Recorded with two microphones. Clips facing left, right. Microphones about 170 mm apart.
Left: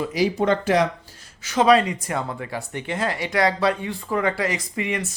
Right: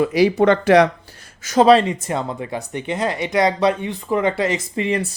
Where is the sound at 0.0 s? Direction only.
65° right (ahead or behind).